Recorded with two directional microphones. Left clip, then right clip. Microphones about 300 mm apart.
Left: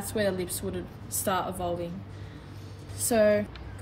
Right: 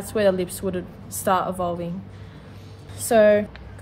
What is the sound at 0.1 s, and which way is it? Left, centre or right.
A woman's voice, centre.